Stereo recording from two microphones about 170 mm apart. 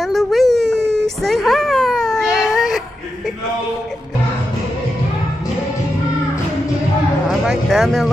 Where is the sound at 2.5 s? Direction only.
Centre (ahead or behind).